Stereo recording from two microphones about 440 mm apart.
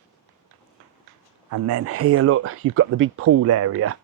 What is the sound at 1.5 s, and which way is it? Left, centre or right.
Speech, right.